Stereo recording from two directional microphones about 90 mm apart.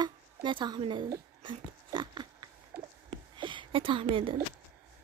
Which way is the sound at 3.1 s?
65° right (ahead or behind).